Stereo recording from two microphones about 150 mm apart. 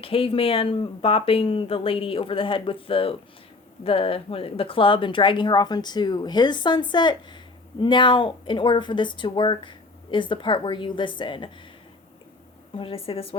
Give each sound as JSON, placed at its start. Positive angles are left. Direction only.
{"t": 0.0, "sound": "a woman's voice", "side_deg": 40}
{"t": 12.7, "sound": "a woman's voice", "side_deg": 40}